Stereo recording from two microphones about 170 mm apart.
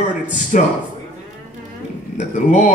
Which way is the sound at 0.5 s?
45° left (ahead or behind).